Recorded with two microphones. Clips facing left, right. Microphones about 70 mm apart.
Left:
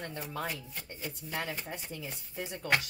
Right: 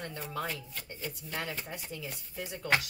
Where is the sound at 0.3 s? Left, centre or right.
Centre.